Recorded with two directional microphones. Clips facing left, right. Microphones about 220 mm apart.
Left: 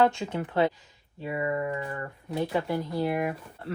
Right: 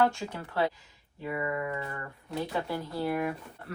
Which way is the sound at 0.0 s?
20° left (ahead or behind).